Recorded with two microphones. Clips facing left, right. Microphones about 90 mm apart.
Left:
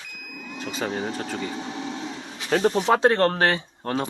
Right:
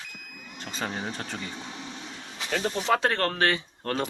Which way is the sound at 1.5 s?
90° left.